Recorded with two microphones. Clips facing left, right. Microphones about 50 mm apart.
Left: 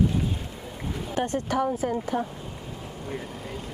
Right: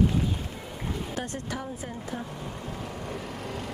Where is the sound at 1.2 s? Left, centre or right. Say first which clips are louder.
Left 11 dB; left.